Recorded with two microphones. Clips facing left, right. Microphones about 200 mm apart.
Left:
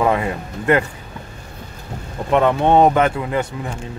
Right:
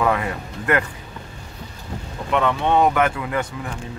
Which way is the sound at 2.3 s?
40° left (ahead or behind).